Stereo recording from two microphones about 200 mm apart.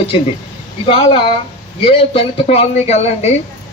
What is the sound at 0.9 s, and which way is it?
A man's voice, 25° left (ahead or behind).